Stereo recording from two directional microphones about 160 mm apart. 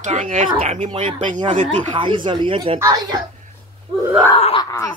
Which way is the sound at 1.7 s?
30° right (ahead or behind).